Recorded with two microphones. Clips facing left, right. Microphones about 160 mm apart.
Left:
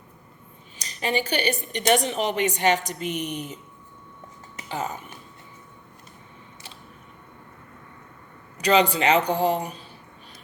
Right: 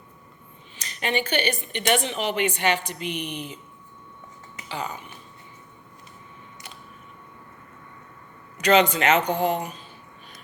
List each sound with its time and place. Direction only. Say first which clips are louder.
0.8 s a woman's voice: left 1 dB; 35° left (ahead or behind)
4.7 s speech: left 2 dB; 45° left (ahead or behind)
8.5 s a woman's voice: right 1 dB; 35° left (ahead or behind)